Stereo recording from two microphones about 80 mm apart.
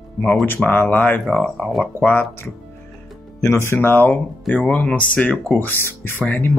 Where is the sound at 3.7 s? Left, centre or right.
Left.